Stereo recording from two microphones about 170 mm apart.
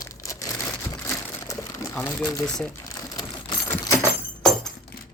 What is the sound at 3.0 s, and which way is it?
Keys jangling, 20° left (ahead or behind).